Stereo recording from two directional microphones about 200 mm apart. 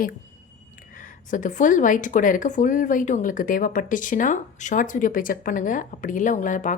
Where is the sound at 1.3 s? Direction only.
40° left (ahead or behind).